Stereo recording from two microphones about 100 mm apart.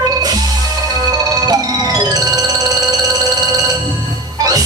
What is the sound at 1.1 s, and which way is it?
Music, 40° right (ahead or behind).